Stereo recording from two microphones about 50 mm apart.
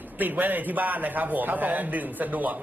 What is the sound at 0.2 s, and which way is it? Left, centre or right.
A man's voice, right.